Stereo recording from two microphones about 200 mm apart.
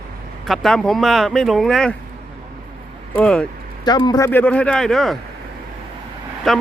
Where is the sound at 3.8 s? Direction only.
20° left (ahead or behind).